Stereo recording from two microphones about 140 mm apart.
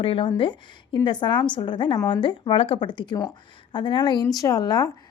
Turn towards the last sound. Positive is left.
turn(degrees=25)  # may be behind; listen again after turning